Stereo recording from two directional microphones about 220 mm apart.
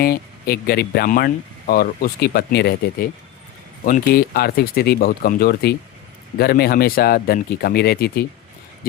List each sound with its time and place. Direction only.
0.0 s speech: 40° left (ahead or behind)